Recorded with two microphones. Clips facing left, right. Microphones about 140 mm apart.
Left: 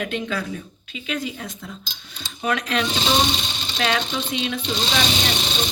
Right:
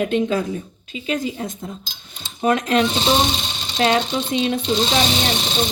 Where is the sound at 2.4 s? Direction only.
40° right (ahead or behind).